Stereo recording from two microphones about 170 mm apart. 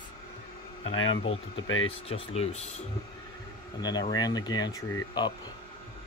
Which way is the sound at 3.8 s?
25° left (ahead or behind).